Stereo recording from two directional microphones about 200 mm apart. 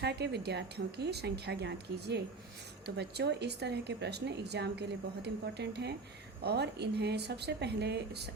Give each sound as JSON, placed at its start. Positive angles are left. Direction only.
{"t": 0.0, "sound": "speech", "side_deg": -55}